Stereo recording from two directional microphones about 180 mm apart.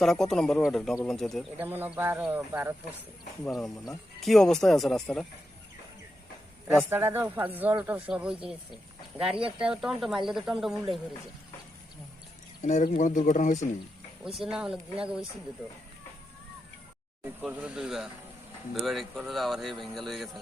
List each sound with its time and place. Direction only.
0.0 s speech: centre (ahead or behind)
1.5 s speech: 10° right (ahead or behind)
3.4 s speech: centre (ahead or behind)
6.7 s speech: 10° right (ahead or behind)
12.6 s speech: 40° left (ahead or behind)
14.3 s speech: 5° right (ahead or behind)
17.2 s speech: 5° right (ahead or behind)